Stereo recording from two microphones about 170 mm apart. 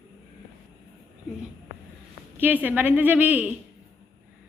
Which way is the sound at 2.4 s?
10° right (ahead or behind).